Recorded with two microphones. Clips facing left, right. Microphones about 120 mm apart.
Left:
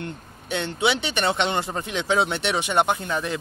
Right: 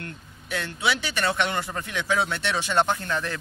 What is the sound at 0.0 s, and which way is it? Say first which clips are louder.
A man's voice: left 5 dB; 25° left (ahead or behind).